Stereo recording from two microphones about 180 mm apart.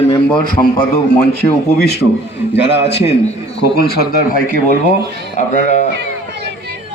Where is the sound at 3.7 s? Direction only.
60° left (ahead or behind).